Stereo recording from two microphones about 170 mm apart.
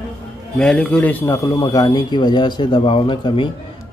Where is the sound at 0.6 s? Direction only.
5° left (ahead or behind); by 3.4 s 30° left (ahead or behind).